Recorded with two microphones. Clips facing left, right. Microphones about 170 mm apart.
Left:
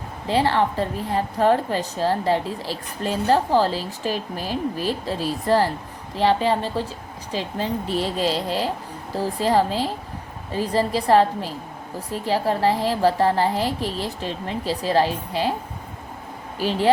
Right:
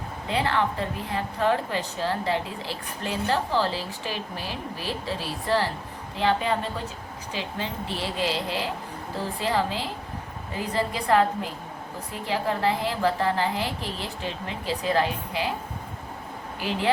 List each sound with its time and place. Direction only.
0.3 s a woman's voice: 35° left (ahead or behind)
16.6 s a woman's voice: 35° left (ahead or behind)